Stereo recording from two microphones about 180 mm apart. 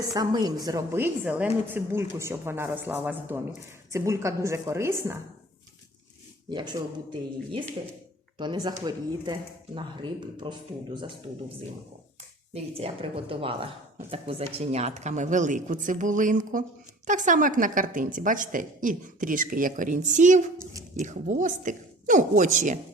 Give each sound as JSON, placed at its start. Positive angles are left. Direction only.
{"t": 0.1, "sound": "a woman's voice", "side_deg": -20}
{"t": 6.5, "sound": "speech", "side_deg": -25}
{"t": 8.4, "sound": "speech", "side_deg": -25}
{"t": 12.5, "sound": "a woman's voice", "side_deg": -35}
{"t": 20.6, "sound": "speech", "side_deg": -20}
{"t": 21.0, "sound": "a woman's voice", "side_deg": -45}